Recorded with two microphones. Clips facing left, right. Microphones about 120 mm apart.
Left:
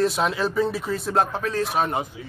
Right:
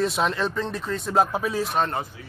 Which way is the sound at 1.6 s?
5° left (ahead or behind).